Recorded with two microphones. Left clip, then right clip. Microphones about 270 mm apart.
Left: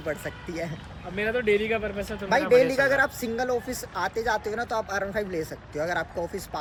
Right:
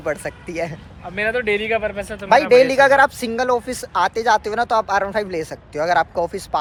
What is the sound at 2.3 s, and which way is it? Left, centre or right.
A man's voice, centre.